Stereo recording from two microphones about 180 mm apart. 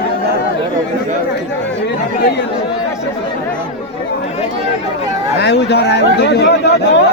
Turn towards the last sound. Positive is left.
turn(degrees=70)  # may be behind; listen again after turning